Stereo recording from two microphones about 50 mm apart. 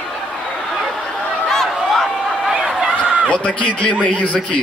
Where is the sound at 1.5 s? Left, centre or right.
Centre.